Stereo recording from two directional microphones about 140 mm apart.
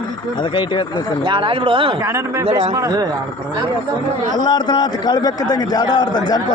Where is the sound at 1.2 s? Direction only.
40° right (ahead or behind).